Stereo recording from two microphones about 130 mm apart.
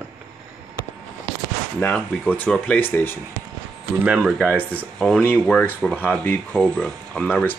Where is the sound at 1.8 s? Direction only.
15° left (ahead or behind).